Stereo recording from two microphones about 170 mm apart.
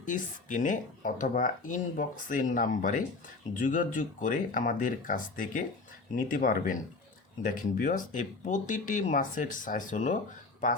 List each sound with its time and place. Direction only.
0.0 s speech: 50° left (ahead or behind)